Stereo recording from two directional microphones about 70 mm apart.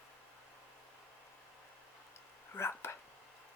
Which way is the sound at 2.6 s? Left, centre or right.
Left.